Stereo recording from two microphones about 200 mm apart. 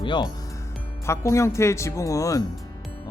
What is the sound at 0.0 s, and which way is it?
Speech, 25° left (ahead or behind).